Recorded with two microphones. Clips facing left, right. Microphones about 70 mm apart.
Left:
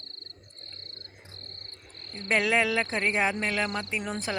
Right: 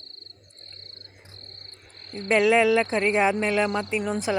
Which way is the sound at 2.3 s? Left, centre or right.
Centre.